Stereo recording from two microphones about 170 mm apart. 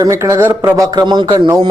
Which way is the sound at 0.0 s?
20° right (ahead or behind).